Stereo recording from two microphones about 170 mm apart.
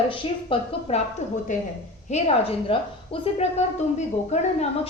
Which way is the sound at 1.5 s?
45° left (ahead or behind).